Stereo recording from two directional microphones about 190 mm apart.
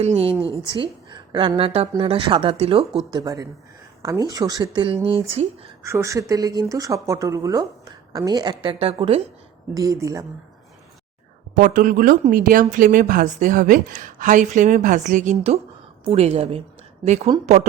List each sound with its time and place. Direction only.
0.0 s a woman's voice: 35° right (ahead or behind)
3.1 s speech: 20° right (ahead or behind)
5.8 s speech: 15° right (ahead or behind); by 9.2 s 30° right (ahead or behind)
9.7 s speech: 15° right (ahead or behind)
11.5 s a woman's voice: 45° right (ahead or behind)